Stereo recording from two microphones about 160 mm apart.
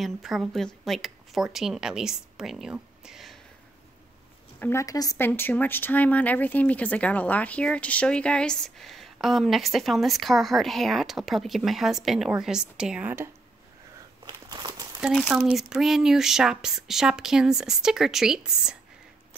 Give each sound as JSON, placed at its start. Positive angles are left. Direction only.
{"t": 0.0, "sound": "speech", "side_deg": 0}
{"t": 4.6, "sound": "speech", "side_deg": 15}
{"t": 14.2, "sound": "a sound", "side_deg": -25}
{"t": 15.0, "sound": "speech", "side_deg": -5}